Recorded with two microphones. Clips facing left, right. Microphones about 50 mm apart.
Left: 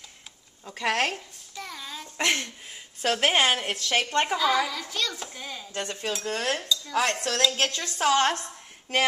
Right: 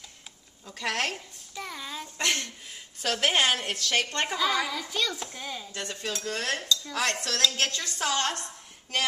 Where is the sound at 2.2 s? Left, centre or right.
Left.